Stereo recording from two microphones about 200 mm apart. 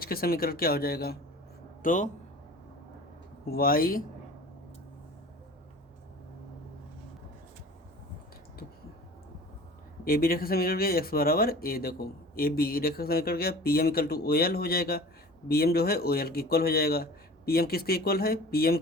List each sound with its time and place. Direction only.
0.0 s speech: 50° left (ahead or behind)
3.4 s speech: 50° left (ahead or behind)
10.0 s speech: 45° left (ahead or behind)